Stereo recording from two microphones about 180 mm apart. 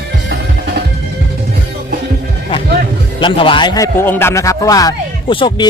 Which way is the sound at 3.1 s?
30° left (ahead or behind).